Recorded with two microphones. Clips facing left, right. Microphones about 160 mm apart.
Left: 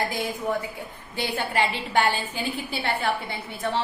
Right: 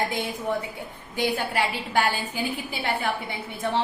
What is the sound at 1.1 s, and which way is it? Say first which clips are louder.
A woman's voice: right 1 dB; 10° right (ahead or behind).